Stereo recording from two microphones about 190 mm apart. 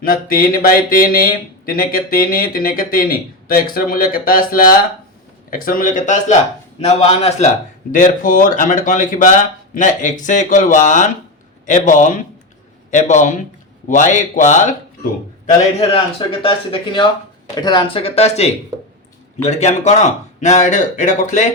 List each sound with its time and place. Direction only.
0.0 s speech: 50° left (ahead or behind)
16.4 s speech: 25° left (ahead or behind)